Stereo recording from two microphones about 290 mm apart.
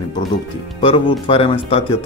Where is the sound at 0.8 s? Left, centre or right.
Centre.